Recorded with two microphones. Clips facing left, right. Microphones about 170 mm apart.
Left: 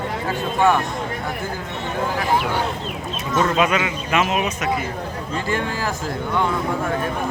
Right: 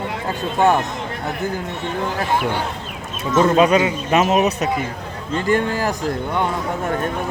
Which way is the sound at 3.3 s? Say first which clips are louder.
Right 5 dB; 30° right (ahead or behind).